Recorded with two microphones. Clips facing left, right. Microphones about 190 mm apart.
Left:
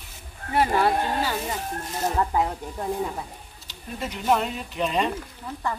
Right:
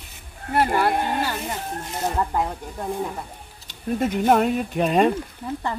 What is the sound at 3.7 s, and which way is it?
Speech, 50° right (ahead or behind).